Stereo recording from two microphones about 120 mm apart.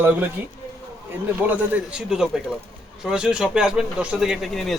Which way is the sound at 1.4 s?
15° right (ahead or behind).